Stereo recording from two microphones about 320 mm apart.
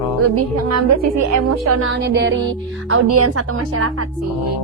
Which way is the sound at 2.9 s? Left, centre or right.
Right.